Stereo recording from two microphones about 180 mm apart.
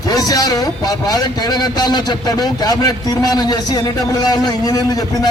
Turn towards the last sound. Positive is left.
turn(degrees=20)  # may be behind; listen again after turning